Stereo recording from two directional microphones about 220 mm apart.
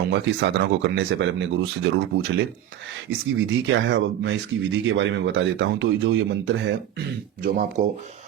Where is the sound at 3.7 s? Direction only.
55° right (ahead or behind).